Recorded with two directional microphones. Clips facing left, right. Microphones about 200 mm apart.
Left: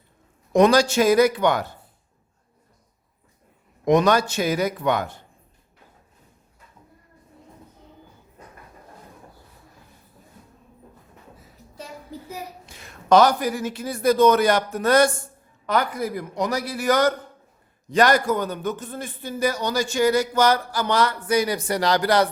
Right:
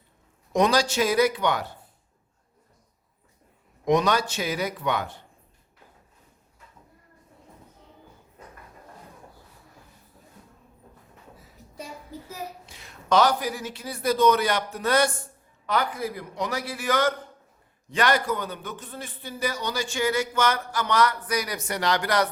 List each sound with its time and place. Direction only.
0.5 s a man's voice: 50° left (ahead or behind)
3.8 s a man's voice: 50° left (ahead or behind)
12.6 s a man's voice: 45° left (ahead or behind)